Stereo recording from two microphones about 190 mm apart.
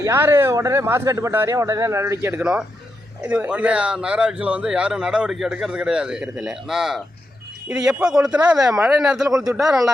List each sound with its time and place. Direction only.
0.0 s speech: 15° right (ahead or behind)